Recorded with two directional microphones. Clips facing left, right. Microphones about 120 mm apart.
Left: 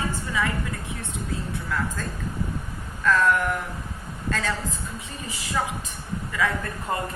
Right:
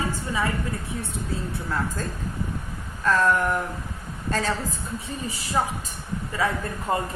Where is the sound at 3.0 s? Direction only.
40° right (ahead or behind).